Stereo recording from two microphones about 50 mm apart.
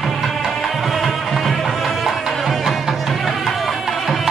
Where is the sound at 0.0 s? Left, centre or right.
Centre.